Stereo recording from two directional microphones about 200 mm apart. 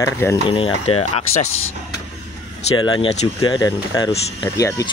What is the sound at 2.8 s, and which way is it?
Speech, 25° left (ahead or behind).